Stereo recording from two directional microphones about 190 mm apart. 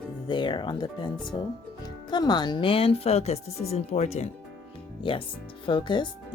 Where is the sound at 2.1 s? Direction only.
20° left (ahead or behind).